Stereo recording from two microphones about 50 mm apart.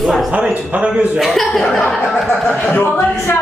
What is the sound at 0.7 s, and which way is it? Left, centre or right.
Speech, right.